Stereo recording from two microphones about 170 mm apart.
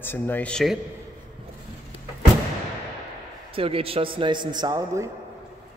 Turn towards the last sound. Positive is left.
turn(degrees=-20)  # may be behind; listen again after turning